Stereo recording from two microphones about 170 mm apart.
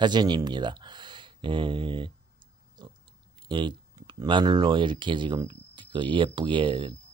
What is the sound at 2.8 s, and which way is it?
Pig, 25° right (ahead or behind).